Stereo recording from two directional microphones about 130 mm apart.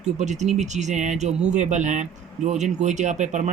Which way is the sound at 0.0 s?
60° right (ahead or behind).